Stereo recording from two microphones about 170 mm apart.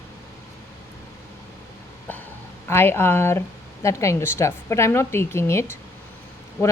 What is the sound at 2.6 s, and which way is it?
A woman's voice, 15° left (ahead or behind).